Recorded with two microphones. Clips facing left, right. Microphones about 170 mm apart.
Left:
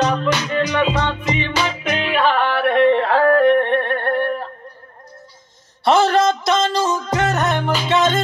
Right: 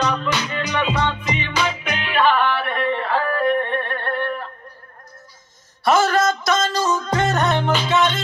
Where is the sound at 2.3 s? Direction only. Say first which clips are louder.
Left 3 dB; 65° left (ahead or behind).